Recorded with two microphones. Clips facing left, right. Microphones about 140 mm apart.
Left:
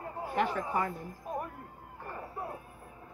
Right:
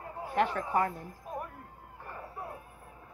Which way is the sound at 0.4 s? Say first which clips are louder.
Right 2 dB; 10° left (ahead or behind).